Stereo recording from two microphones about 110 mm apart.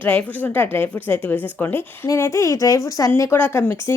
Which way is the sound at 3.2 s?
20° left (ahead or behind).